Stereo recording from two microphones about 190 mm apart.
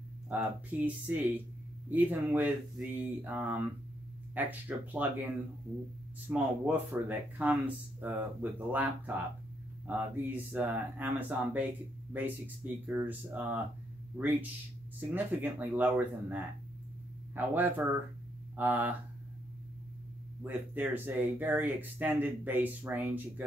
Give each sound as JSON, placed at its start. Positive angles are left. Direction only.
{"t": 0.3, "sound": "speech", "side_deg": -10}
{"t": 12.8, "sound": "speech", "side_deg": -10}
{"t": 20.4, "sound": "speech", "side_deg": -10}